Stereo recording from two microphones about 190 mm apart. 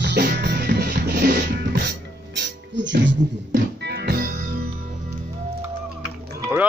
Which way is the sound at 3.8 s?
60° right (ahead or behind).